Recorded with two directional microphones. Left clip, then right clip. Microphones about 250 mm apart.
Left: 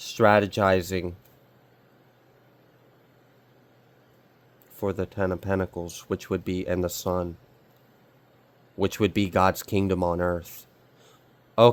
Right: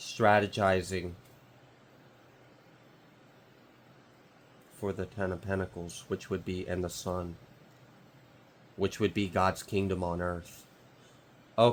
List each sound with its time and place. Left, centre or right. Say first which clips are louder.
0.0 s speech: left 6 dB; left
4.8 s speech: left 7 dB; left
8.8 s speech: left 6 dB; left